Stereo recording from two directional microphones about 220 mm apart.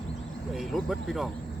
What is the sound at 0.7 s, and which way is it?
Speech, centre (ahead or behind).